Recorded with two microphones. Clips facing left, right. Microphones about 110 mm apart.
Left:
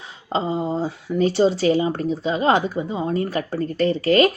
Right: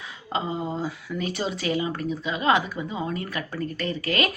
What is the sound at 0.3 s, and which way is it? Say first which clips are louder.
Speech: left 6 dB; 30° left (ahead or behind).